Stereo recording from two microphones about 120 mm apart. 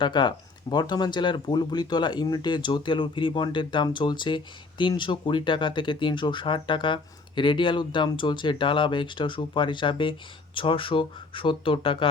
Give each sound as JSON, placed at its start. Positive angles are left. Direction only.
{"t": 0.0, "sound": "speech", "side_deg": 40}